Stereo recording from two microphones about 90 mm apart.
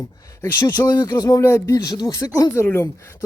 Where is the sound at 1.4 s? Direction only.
30° left (ahead or behind).